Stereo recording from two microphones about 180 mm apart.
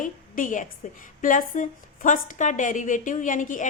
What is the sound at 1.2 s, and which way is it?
A woman's voice, 45° left (ahead or behind).